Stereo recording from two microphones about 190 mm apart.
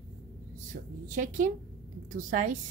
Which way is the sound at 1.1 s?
40° right (ahead or behind).